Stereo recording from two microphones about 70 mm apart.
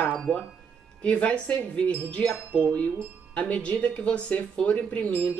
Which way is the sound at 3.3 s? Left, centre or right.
Centre.